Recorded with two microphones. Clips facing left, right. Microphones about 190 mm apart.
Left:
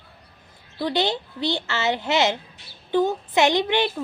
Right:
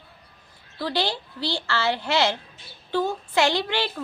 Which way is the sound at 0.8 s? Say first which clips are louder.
Left 3 dB; 20° left (ahead or behind).